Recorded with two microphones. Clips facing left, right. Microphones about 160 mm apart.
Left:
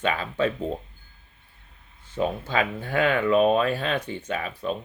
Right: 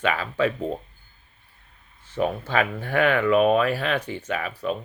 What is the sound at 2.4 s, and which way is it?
Speech, 20° left (ahead or behind).